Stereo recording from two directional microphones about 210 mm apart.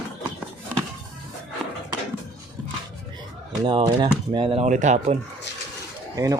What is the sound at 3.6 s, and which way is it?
Speech, 20° right (ahead or behind).